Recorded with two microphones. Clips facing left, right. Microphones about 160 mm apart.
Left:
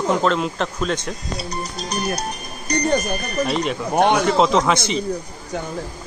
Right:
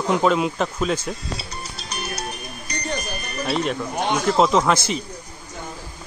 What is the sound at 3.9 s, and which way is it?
Speech, 60° left (ahead or behind).